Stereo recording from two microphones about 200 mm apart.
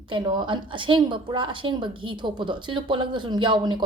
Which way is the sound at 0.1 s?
25° right (ahead or behind).